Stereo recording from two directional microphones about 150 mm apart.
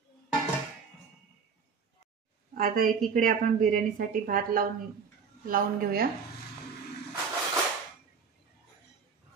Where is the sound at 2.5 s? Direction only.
75° right (ahead or behind).